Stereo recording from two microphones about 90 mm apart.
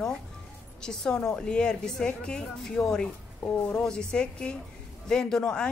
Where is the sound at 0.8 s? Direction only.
5° left (ahead or behind).